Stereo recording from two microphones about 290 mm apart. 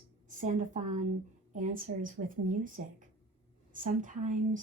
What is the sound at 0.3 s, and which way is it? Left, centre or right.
Speech, right.